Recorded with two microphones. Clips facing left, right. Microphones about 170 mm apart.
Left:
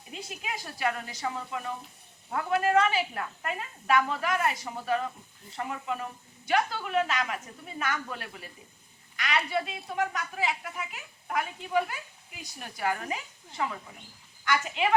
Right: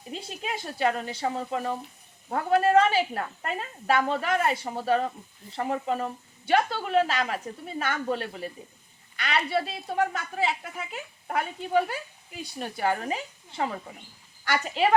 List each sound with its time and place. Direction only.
0.1 s a woman's voice: 30° right (ahead or behind)